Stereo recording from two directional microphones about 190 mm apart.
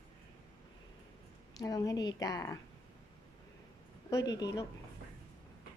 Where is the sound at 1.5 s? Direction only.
20° left (ahead or behind).